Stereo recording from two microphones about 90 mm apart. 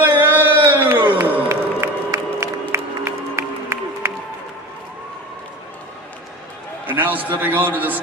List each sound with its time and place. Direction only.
0.0 s a sound: 20° right (ahead or behind)
1.5 s music: 35° right (ahead or behind)
6.9 s a man's voice: 20° right (ahead or behind)